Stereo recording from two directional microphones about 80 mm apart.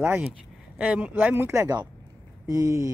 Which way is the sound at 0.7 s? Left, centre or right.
Centre.